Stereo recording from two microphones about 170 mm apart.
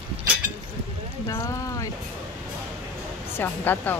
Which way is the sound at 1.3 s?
20° left (ahead or behind).